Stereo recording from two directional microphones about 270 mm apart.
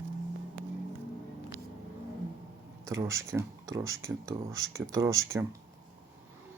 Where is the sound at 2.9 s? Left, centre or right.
Centre.